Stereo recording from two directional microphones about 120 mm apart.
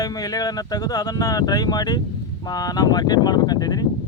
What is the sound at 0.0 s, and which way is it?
Speech, 30° left (ahead or behind).